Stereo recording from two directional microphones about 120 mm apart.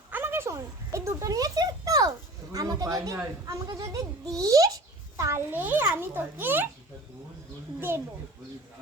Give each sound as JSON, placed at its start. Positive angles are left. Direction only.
{"t": 0.1, "sound": "a sound", "side_deg": -20}
{"t": 3.4, "sound": "a child's voice", "side_deg": -30}
{"t": 7.8, "sound": "a child's voice", "side_deg": -20}